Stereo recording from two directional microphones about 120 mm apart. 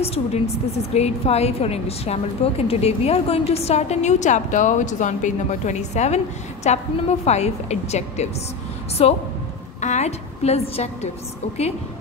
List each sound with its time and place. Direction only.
0.0 s a woman's voice: 60° left (ahead or behind)
9.8 s a woman's voice: 75° left (ahead or behind)